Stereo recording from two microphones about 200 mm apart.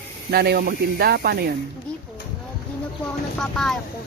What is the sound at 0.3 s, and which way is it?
Speech, 50° right (ahead or behind).